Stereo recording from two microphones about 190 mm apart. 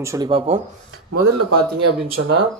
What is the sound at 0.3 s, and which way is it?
Speech, 30° right (ahead or behind).